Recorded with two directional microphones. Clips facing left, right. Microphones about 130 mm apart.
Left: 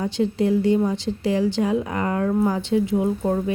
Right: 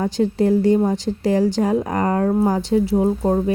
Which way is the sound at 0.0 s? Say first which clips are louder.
Right 3 dB; 40° right (ahead or behind).